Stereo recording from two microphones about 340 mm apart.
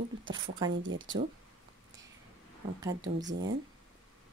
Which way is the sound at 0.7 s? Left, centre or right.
Right.